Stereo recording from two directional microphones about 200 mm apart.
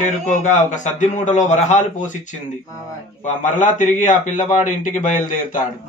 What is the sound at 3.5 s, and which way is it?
A man's voice, 40° left (ahead or behind).